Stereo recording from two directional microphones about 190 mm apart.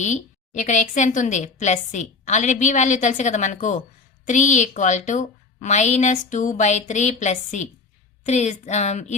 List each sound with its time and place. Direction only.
0.0 s a woman's voice: 40° left (ahead or behind)